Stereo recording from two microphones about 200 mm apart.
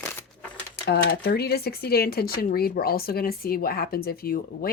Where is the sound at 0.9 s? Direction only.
55° left (ahead or behind).